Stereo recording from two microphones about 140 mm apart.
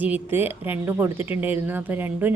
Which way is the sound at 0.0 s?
10° right (ahead or behind).